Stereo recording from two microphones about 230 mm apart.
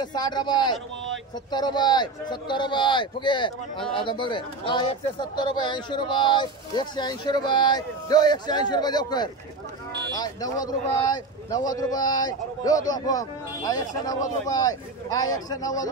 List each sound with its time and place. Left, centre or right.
0.0 s a man's voice: centre